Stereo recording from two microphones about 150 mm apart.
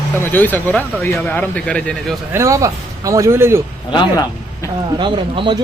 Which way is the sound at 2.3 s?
20° right (ahead or behind).